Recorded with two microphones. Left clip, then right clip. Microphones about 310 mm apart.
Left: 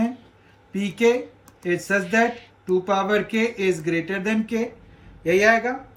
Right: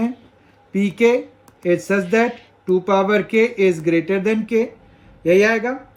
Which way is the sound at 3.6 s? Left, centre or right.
Centre.